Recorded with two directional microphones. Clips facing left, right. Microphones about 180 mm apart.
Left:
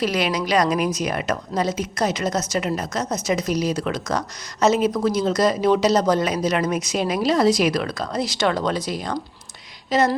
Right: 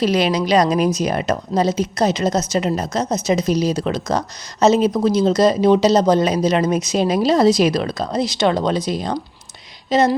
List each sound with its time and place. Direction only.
0.0 s speech: 25° right (ahead or behind)